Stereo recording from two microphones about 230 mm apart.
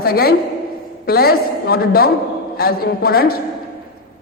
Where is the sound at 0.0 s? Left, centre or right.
Left.